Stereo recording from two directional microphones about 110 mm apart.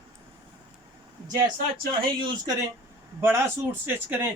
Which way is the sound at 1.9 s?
45° right (ahead or behind).